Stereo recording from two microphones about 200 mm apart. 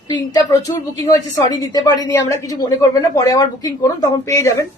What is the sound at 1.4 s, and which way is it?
A woman's voice, 15° left (ahead or behind).